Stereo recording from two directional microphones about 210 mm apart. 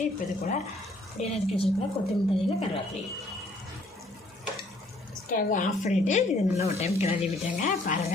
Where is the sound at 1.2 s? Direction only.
30° left (ahead or behind).